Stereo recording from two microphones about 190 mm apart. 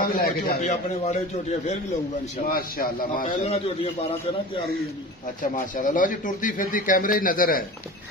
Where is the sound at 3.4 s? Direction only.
30° left (ahead or behind).